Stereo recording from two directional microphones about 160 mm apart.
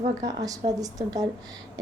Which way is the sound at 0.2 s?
20° right (ahead or behind).